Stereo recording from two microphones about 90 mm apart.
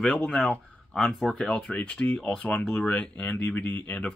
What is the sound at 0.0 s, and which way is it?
Speech, 10° left (ahead or behind).